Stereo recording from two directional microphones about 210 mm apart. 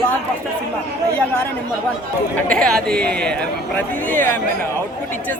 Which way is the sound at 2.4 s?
5° left (ahead or behind).